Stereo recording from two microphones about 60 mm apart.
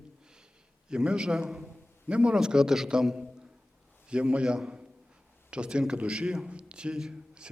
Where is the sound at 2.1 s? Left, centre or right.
Centre.